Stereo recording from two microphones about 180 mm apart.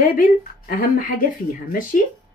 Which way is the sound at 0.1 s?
50° left (ahead or behind).